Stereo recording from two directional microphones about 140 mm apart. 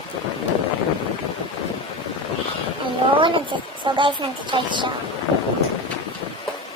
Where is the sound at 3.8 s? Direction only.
35° right (ahead or behind).